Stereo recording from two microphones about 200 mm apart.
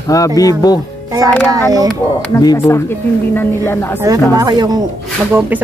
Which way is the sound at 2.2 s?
15° left (ahead or behind).